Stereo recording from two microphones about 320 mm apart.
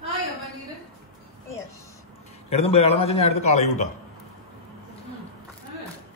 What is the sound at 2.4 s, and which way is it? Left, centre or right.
A man's voice, centre.